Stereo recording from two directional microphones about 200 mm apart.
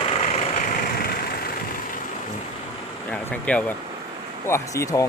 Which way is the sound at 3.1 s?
5° left (ahead or behind).